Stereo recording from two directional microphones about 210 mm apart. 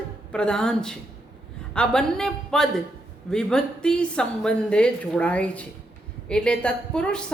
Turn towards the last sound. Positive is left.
turn(degrees=5)  # may be behind; listen again after turning